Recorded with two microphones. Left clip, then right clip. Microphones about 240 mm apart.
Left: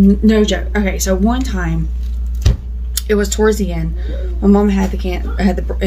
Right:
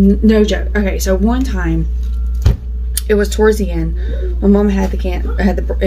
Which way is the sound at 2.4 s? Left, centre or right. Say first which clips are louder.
Even; centre.